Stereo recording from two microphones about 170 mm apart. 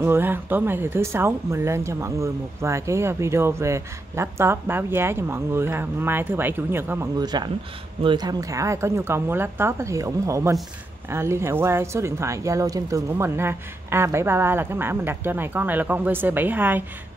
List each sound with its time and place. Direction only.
0.0 s speech: 15° right (ahead or behind)
7.2 s speech: 25° right (ahead or behind)